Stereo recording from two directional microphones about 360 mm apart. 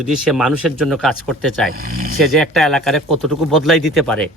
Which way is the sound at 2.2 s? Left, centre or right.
Centre.